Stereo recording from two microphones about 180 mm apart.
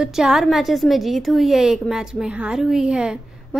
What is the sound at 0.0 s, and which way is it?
A woman's voice, 5° right (ahead or behind).